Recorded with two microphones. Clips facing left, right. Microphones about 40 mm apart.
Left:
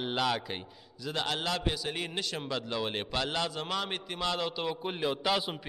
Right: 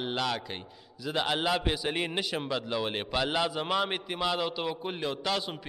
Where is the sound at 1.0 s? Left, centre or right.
Centre.